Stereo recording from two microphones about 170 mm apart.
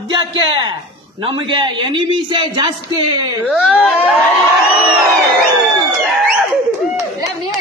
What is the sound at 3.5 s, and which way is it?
Speech, 5° right (ahead or behind).